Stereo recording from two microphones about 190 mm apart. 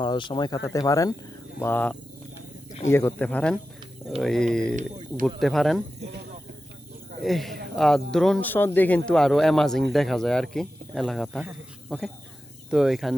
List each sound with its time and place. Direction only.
0.0 s speech: 25° left (ahead or behind); by 5.8 s centre (ahead or behind)
7.3 s speech: centre (ahead or behind)